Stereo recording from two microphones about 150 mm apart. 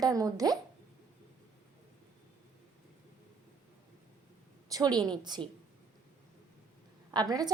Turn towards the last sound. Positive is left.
turn(degrees=-25)  # may be behind; listen again after turning